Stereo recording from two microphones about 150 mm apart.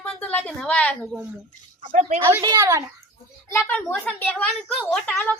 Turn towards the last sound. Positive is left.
turn(degrees=5)  # may be behind; listen again after turning